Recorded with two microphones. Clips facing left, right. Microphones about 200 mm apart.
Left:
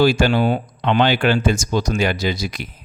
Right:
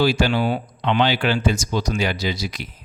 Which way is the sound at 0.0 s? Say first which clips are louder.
Left 3 dB; 50° left (ahead or behind).